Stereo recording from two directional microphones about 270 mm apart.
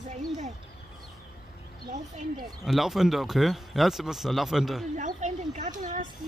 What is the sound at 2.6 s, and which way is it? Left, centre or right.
Speech, centre.